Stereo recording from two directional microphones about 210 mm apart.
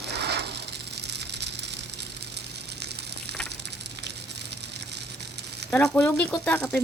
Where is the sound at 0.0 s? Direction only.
55° right (ahead or behind).